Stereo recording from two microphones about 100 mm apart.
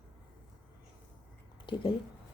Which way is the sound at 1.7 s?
50° left (ahead or behind).